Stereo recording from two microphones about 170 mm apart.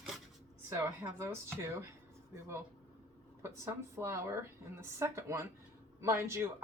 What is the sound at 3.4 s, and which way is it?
Speech, 15° right (ahead or behind).